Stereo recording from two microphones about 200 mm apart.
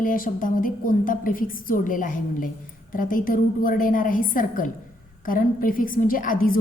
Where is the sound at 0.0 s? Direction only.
45° left (ahead or behind).